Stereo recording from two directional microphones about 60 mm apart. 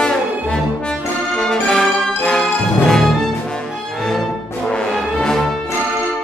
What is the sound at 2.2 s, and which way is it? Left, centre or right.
Music, centre.